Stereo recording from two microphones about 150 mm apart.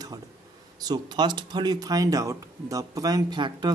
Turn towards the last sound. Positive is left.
turn(degrees=-30)  # may be behind; listen again after turning